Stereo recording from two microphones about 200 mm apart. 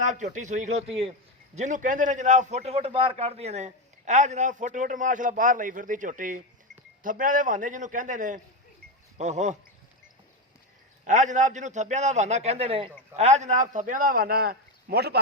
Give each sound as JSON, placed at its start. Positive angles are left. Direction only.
{"t": 0.0, "sound": "a man's voice", "side_deg": -35}
{"t": 11.0, "sound": "a man's voice", "side_deg": -40}